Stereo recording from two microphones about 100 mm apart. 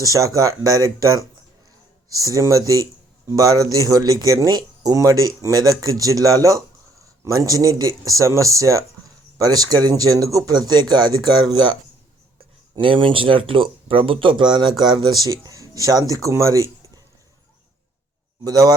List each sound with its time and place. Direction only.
0.0 s speech: 35° right (ahead or behind)
12.7 s speech: 60° right (ahead or behind); by 17.0 s 30° right (ahead or behind)
18.4 s speech: 40° right (ahead or behind)